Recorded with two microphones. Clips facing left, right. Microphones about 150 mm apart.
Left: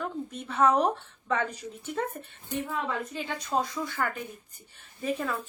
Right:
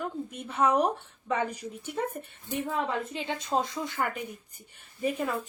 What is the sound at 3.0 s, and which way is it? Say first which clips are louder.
A woman's voice: right 1 dB; 25° right (ahead or behind).